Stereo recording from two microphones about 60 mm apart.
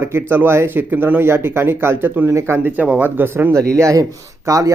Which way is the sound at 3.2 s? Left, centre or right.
Right.